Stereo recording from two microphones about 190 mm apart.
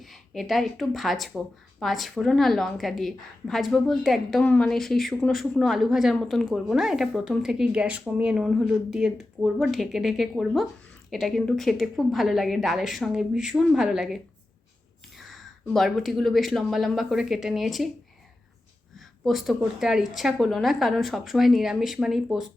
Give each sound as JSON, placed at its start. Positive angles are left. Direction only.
{"t": 0.0, "sound": "a woman's voice", "side_deg": 0}
{"t": 15.2, "sound": "a woman's voice", "side_deg": 0}
{"t": 18.9, "sound": "a woman's voice", "side_deg": 0}